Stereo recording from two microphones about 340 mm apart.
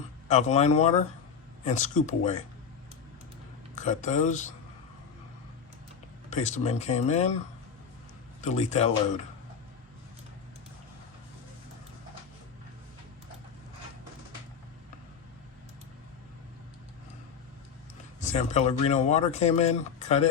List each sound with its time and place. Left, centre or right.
0.3 s speech: centre
3.8 s speech: left
6.3 s speech: centre
8.4 s speech: centre
18.2 s speech: left